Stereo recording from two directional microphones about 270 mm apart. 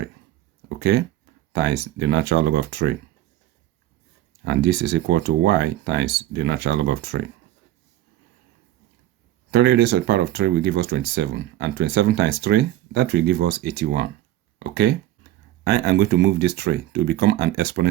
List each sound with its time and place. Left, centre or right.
0.8 s speech: right
4.4 s speech: right
9.5 s speech: right